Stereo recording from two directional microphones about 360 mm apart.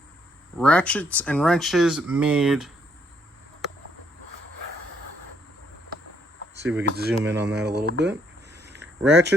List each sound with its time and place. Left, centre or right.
0.6 s speech: centre
6.8 s speech: right
8.8 s a sound: right